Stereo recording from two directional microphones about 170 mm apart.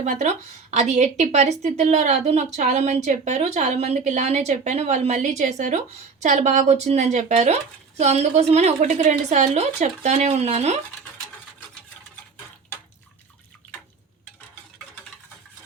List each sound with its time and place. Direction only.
0.0 s a woman's voice: 45° right (ahead or behind)